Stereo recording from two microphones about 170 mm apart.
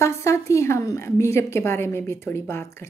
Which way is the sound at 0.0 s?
15° left (ahead or behind).